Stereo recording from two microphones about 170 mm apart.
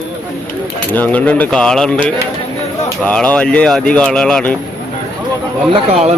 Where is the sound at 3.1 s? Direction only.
5° left (ahead or behind).